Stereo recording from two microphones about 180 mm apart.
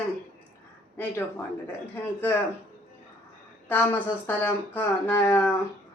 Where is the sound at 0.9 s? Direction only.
10° left (ahead or behind).